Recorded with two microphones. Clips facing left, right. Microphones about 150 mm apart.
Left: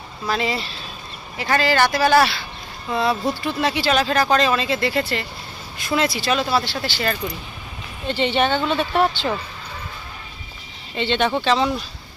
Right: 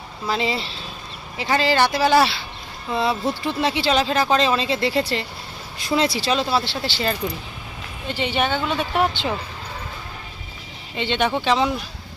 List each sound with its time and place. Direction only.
0.3 s speech: 25° right (ahead or behind)
8.0 s a woman's voice: 10° right (ahead or behind)
10.9 s a woman's voice: 15° right (ahead or behind)